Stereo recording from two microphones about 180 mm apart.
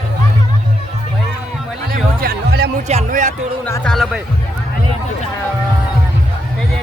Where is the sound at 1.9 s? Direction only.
60° right (ahead or behind).